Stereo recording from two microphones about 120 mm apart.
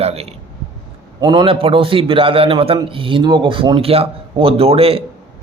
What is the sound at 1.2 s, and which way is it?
Speech, 35° right (ahead or behind).